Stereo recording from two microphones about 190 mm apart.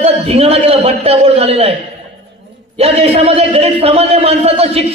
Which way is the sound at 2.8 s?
30° right (ahead or behind).